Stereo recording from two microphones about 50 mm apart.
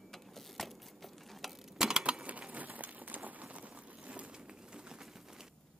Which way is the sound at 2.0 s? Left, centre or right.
Right.